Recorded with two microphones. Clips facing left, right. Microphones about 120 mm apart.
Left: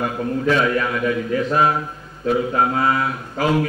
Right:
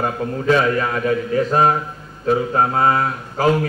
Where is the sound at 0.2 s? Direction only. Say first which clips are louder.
Right 1 dB; 35° right (ahead or behind).